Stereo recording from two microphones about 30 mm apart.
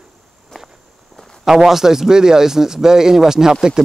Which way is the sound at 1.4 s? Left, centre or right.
Centre.